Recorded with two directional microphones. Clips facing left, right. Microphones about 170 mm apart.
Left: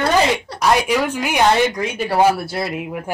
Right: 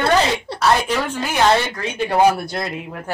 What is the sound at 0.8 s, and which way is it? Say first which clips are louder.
Speech: left 3 dB; 10° left (ahead or behind).